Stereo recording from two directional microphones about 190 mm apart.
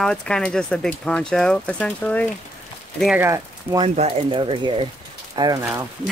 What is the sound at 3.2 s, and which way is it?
Speech, 15° right (ahead or behind).